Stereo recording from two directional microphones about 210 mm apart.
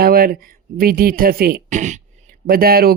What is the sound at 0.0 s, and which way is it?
Speech, 45° right (ahead or behind).